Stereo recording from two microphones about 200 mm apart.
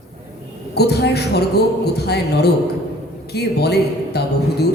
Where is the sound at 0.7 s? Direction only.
55° left (ahead or behind).